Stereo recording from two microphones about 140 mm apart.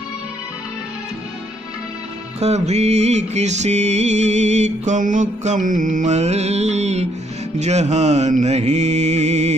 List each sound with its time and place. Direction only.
2.4 s music: 50° right (ahead or behind)
7.5 s mantra: 55° right (ahead or behind)